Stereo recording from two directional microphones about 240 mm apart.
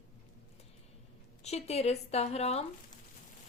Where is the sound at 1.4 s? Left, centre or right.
Left.